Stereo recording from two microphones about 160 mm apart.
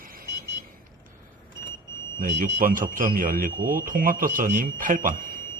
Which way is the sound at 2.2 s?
60° right (ahead or behind).